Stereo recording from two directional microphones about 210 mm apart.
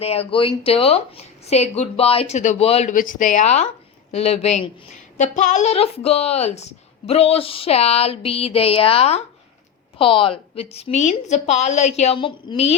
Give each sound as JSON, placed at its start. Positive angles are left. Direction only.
{"t": 0.0, "sound": "speech", "side_deg": 30}